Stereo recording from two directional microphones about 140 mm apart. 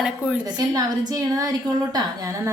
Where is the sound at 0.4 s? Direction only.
25° right (ahead or behind).